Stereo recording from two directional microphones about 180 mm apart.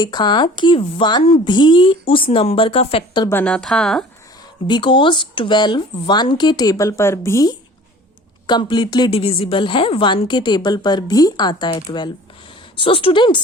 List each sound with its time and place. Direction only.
0.0 s a woman's voice: 25° left (ahead or behind)
3.2 s speech: 10° left (ahead or behind)
4.6 s a woman's voice: 25° left (ahead or behind)